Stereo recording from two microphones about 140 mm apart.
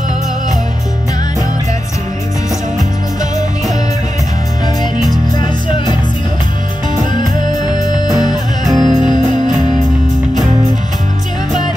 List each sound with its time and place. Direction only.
7.6 s music: 30° left (ahead or behind)
8.2 s music: 25° right (ahead or behind)